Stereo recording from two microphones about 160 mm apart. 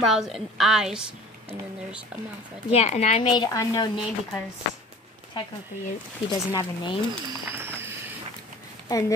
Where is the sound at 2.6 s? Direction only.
40° left (ahead or behind); by 4.4 s 25° left (ahead or behind).